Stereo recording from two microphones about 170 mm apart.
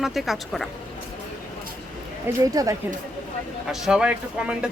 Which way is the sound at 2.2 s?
20° right (ahead or behind).